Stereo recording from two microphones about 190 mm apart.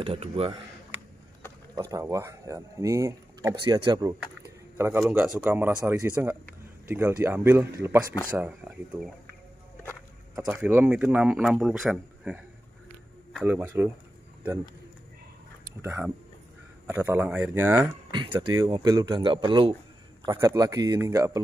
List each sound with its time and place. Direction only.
0.0 s speech: 30° right (ahead or behind)
1.8 s a man's voice: 15° right (ahead or behind)
10.3 s a man's voice: 15° right (ahead or behind)
13.5 s a man's voice: 10° right (ahead or behind)
15.8 s a man's voice: 15° right (ahead or behind)